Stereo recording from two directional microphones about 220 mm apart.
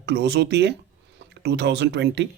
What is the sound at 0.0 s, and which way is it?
A man's voice, 50° right (ahead or behind).